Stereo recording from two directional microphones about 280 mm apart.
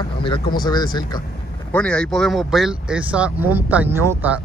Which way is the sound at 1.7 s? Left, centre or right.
Centre.